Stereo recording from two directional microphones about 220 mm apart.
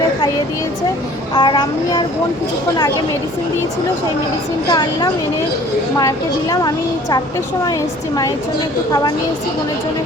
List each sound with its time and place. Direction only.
1.4 s child singing: 20° left (ahead or behind)
4.7 s child singing: 20° left (ahead or behind)
6.0 s a woman's voice: 15° left (ahead or behind)